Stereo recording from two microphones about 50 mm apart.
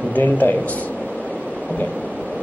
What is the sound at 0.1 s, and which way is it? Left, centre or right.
Speech, left.